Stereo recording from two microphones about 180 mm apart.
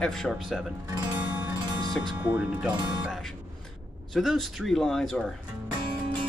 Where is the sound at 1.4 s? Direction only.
20° right (ahead or behind).